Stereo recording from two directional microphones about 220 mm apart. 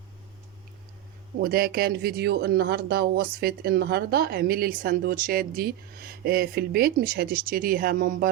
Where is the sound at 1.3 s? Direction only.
45° right (ahead or behind).